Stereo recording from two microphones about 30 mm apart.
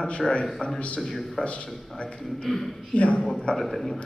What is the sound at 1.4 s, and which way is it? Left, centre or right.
Speech, left.